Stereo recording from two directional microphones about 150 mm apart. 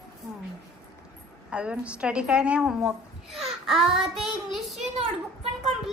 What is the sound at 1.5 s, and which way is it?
A woman's voice, 5° right (ahead or behind).